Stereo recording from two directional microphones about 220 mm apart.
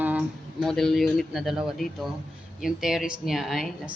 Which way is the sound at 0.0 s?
5° right (ahead or behind).